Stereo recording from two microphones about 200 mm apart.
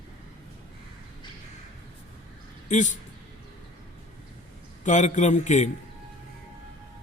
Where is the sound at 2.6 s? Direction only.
40° left (ahead or behind).